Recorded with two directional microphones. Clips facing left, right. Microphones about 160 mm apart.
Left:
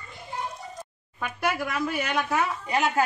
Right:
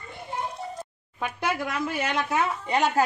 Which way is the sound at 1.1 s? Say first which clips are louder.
Even; 20° right (ahead or behind).